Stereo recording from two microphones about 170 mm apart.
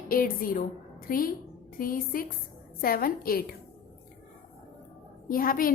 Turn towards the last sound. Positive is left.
turn(degrees=55)  # may be behind; listen again after turning